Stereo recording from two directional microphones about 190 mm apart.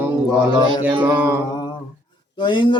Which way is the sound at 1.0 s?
10° right (ahead or behind).